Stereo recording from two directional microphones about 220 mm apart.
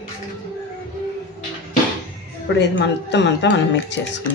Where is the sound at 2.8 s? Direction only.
50° left (ahead or behind).